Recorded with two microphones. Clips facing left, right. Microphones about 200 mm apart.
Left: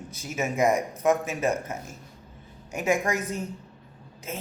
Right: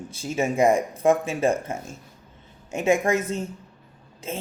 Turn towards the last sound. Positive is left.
turn(degrees=-25)  # may be behind; listen again after turning